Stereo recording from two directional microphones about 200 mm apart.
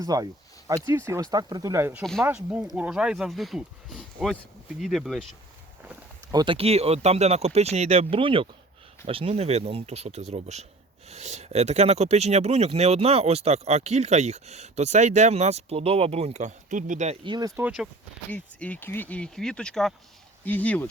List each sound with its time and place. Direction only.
0.0 s speech: 20° right (ahead or behind); by 5.2 s centre (ahead or behind)
6.3 s speech: 25° right (ahead or behind)
17.2 s speech: 20° right (ahead or behind)
17.6 s speech: 5° right (ahead or behind)
18.3 s speech: 5° left (ahead or behind)